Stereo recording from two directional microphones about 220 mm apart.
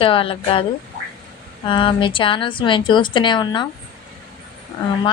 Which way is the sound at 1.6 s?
20° left (ahead or behind).